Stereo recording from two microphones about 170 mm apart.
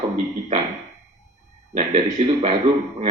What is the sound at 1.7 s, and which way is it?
Speech, 40° right (ahead or behind).